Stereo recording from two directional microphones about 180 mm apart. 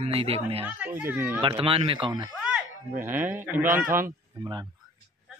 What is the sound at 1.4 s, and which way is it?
Speech, 30° right (ahead or behind).